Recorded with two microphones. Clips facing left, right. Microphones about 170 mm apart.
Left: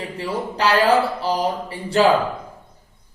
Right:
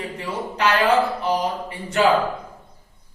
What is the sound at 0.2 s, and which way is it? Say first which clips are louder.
A woman's voice: left 2 dB; 35° left (ahead or behind).